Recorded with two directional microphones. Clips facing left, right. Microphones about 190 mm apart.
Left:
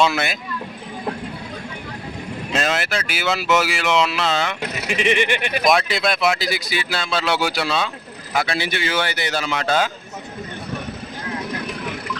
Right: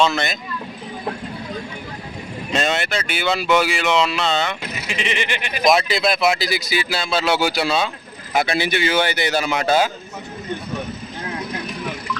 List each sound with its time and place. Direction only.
0.0 s speech: 10° left (ahead or behind)
2.5 s speech: centre (ahead or behind)
4.9 s speech: 50° left (ahead or behind)
5.6 s speech: centre (ahead or behind)